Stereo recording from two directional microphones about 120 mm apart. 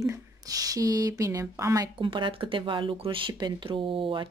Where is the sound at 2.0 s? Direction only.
45° right (ahead or behind).